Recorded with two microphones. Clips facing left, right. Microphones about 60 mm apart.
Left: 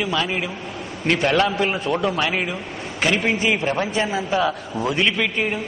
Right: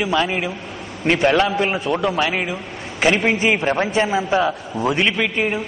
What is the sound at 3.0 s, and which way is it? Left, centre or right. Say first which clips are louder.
A man's voice: right 3 dB; right.